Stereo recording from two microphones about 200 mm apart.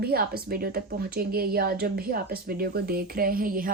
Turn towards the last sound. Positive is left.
turn(degrees=-45)  # may be behind; listen again after turning